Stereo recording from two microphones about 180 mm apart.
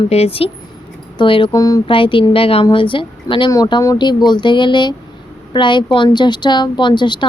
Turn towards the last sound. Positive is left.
turn(degrees=25)  # may be behind; listen again after turning